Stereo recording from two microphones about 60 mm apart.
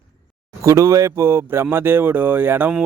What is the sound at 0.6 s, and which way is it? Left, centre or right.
A man's voice, right.